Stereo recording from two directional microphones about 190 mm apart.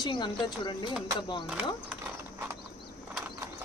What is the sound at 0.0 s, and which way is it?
Speech, 25° left (ahead or behind).